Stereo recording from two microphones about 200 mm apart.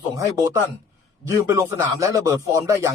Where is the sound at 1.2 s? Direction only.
15° right (ahead or behind).